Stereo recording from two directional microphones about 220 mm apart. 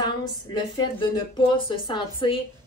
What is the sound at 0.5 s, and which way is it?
Speech, 20° left (ahead or behind).